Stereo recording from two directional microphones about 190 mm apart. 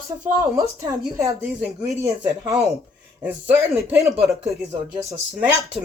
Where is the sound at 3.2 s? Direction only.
10° right (ahead or behind).